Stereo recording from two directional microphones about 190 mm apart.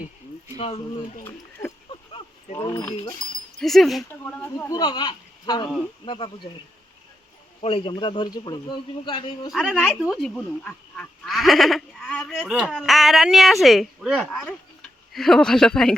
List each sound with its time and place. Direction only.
0.5 s speech: 35° left (ahead or behind)
1.2 s a sound: 15° left (ahead or behind)
1.9 s wind chime: 25° left (ahead or behind)
3.6 s speech: centre (ahead or behind)
4.7 s a man's voice: 20° left (ahead or behind)
7.6 s a man's voice: 30° left (ahead or behind)
9.5 s speech: centre (ahead or behind)